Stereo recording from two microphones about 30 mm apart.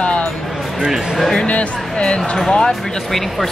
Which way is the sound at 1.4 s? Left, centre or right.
Left.